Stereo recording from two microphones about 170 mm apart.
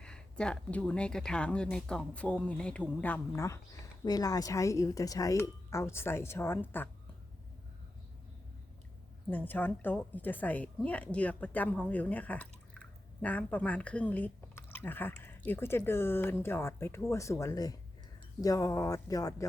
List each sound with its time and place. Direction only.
0.0 s a woman's voice: 5° left (ahead or behind)
9.3 s a woman's voice: 10° left (ahead or behind)